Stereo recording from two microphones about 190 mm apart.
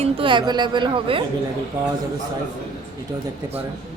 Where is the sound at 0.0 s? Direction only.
25° right (ahead or behind).